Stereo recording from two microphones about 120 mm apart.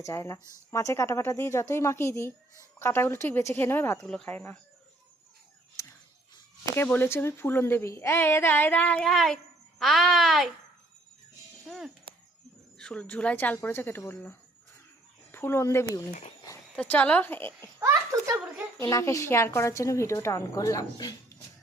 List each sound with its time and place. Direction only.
0.0 s a woman's voice: 25° left (ahead or behind)
4.0 s speech: 10° left (ahead or behind)
5.8 s a sound: 25° left (ahead or behind)
6.7 s speech: 15° left (ahead or behind); by 10.5 s centre (ahead or behind)
11.7 s speech: 5° left (ahead or behind)
17.7 s a sound: 25° right (ahead or behind)
18.8 s a woman's voice: 25° left (ahead or behind)